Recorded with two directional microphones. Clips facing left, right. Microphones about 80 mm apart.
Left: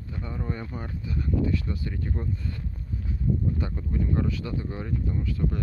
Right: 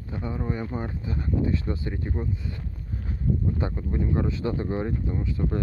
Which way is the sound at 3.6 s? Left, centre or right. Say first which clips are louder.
Right 2 dB; right.